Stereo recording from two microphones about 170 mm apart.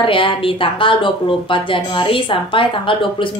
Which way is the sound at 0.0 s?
30° left (ahead or behind).